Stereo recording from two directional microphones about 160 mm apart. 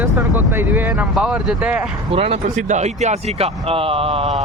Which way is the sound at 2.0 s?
35° right (ahead or behind).